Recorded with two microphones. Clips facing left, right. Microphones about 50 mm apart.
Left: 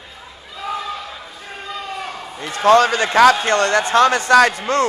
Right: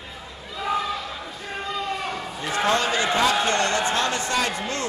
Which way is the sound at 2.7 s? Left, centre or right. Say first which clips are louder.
Left 10 dB; left.